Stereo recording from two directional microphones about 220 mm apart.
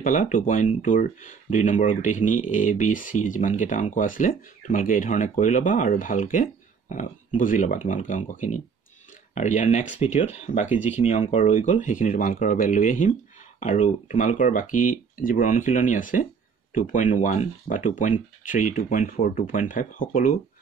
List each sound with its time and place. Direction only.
0.0 s speech: 35° left (ahead or behind)
10.7 s speech: 10° right (ahead or behind)
11.1 s speech: 30° left (ahead or behind)